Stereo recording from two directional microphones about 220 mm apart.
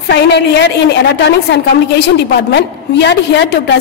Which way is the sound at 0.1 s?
50° left (ahead or behind).